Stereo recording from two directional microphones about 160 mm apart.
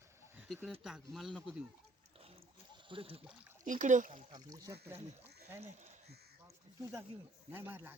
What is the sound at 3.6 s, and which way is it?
Speech, 50° right (ahead or behind).